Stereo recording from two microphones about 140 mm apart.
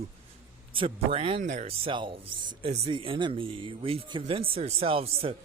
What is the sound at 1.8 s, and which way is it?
Speech, 35° right (ahead or behind).